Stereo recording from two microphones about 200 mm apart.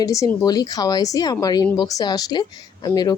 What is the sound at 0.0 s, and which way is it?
A woman's voice, 15° left (ahead or behind).